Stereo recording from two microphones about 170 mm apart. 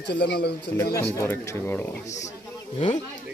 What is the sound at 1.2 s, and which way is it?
Speech, 15° left (ahead or behind).